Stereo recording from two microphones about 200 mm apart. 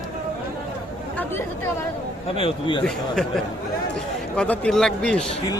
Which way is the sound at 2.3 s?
25° left (ahead or behind).